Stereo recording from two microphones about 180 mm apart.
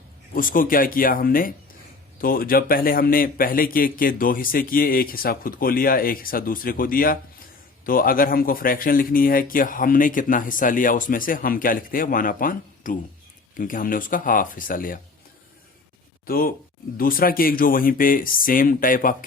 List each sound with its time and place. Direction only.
0.3 s speech: 50° left (ahead or behind)
16.2 s speech: 55° left (ahead or behind)